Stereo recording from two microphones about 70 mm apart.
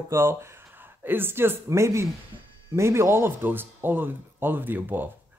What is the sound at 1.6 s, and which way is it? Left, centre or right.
Speech, right.